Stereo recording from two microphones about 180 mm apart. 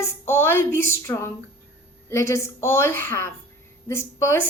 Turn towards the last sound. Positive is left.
turn(degrees=15)  # may be behind; listen again after turning